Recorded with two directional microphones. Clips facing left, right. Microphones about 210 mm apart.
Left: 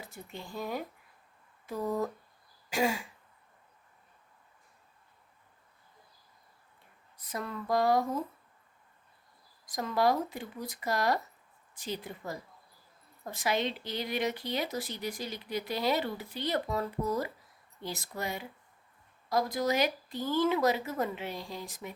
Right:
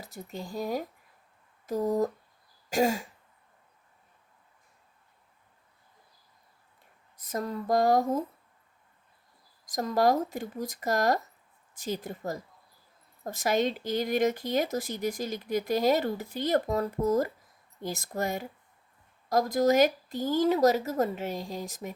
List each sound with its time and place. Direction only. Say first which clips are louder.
0.0 s speech: right 5 dB; 40° right (ahead or behind)
1.6 s a sound: right 6 dB; 40° right (ahead or behind)
2.6 s throat clearing: right 4 dB; 45° right (ahead or behind)
7.2 s speech: right 5 dB; 45° right (ahead or behind)
9.6 s speech: right 3 dB; 45° right (ahead or behind)